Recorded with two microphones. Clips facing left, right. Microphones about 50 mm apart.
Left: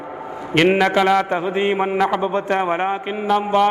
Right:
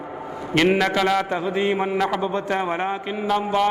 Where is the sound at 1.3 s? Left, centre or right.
Left.